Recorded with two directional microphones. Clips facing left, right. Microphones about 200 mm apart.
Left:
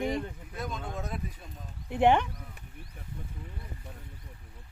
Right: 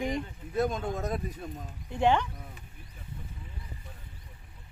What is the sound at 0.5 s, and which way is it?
Speech, 40° right (ahead or behind).